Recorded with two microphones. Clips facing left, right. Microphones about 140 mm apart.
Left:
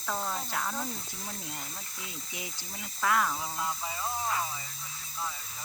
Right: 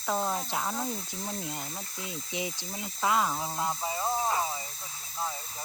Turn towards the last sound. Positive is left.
turn(degrees=-25)  # may be behind; listen again after turning